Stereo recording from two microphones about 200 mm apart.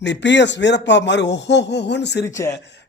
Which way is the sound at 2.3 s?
15° left (ahead or behind).